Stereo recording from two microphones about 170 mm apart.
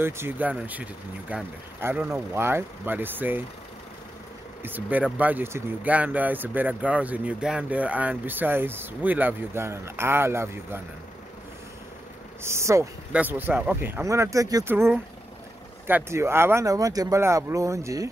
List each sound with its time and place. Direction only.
0.0 s speech: 10° right (ahead or behind)
4.6 s speech: 10° right (ahead or behind)
12.4 s speech: 15° right (ahead or behind)